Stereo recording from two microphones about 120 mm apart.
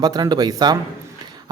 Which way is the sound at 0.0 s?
35° right (ahead or behind).